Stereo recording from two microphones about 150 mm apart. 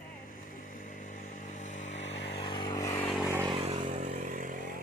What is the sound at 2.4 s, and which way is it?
Vehicle, 30° left (ahead or behind).